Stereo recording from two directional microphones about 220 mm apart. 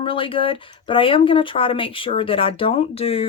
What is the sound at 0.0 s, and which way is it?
Speech, 25° left (ahead or behind).